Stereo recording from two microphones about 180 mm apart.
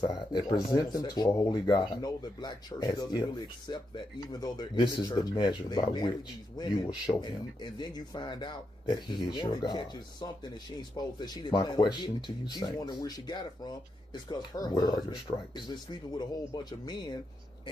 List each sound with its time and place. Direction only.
0.0 s speech: 25° left (ahead or behind)